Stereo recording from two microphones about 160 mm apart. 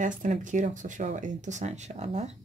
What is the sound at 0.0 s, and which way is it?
Speech, 50° right (ahead or behind).